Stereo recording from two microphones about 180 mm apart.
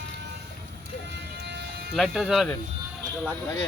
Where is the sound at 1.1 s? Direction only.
70° right (ahead or behind).